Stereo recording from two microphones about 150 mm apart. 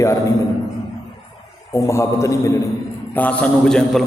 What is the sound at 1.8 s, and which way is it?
A man's voice, 20° left (ahead or behind).